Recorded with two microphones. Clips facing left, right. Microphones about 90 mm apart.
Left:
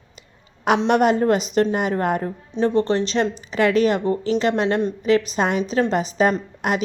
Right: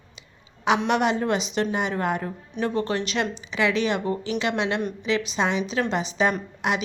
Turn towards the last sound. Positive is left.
turn(degrees=45)  # may be behind; listen again after turning